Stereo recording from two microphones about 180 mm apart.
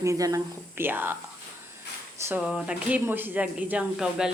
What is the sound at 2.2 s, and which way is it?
Speech, 10° right (ahead or behind).